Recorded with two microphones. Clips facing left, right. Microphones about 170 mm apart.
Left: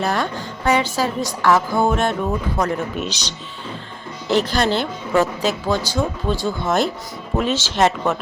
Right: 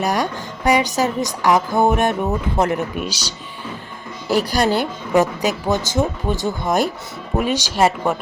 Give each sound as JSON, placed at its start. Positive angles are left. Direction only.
{"t": 0.0, "sound": "a woman's voice", "side_deg": -15}